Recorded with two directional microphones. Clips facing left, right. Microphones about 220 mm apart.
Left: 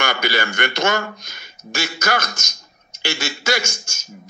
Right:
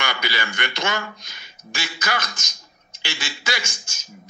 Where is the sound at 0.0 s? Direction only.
45° left (ahead or behind).